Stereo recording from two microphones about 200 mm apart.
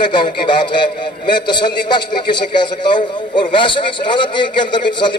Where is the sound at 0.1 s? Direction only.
25° left (ahead or behind).